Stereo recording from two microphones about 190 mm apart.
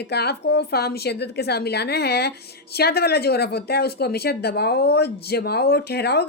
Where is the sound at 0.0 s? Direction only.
60° left (ahead or behind).